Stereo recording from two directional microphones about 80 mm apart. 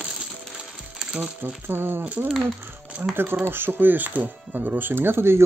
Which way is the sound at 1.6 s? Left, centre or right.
Right.